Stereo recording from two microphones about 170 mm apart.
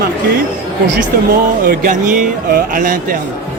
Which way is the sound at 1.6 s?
50° right (ahead or behind).